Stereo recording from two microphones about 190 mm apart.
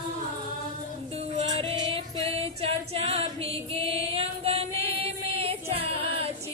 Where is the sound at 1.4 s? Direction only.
30° right (ahead or behind).